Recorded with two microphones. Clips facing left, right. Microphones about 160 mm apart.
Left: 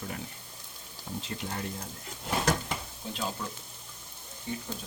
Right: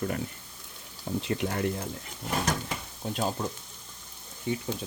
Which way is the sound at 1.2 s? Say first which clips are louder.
Right 8 dB; 70° right (ahead or behind).